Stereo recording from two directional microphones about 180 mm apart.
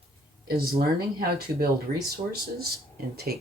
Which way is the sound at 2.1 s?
55° right (ahead or behind).